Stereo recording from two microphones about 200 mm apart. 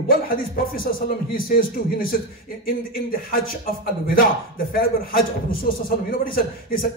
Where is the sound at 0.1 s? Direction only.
45° left (ahead or behind).